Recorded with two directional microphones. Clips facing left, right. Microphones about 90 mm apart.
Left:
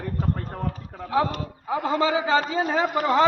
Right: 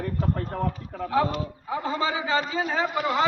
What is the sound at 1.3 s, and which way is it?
Speech, 65° left (ahead or behind).